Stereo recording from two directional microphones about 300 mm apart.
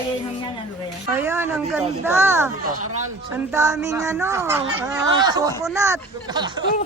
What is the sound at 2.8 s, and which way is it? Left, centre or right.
Speech, right.